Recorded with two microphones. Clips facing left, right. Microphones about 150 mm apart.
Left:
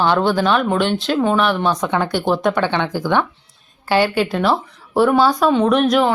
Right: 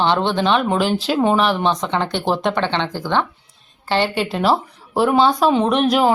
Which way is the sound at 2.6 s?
10° left (ahead or behind).